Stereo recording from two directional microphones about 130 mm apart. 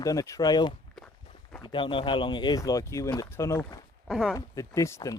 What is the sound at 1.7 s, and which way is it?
Speech, 40° left (ahead or behind).